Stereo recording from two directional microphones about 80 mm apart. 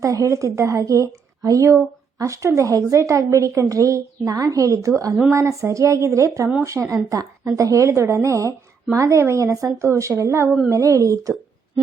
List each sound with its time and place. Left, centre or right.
0.0 s a woman's voice: right